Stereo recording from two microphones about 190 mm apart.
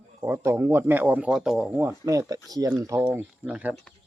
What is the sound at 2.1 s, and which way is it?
Speech, 20° right (ahead or behind).